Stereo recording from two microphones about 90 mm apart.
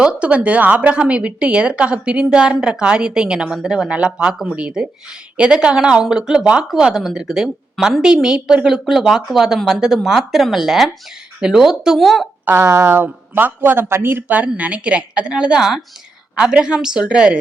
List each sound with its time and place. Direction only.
0.0 s a woman's voice: 10° right (ahead or behind)
12.5 s a woman's voice: 25° right (ahead or behind); by 17.4 s 10° right (ahead or behind)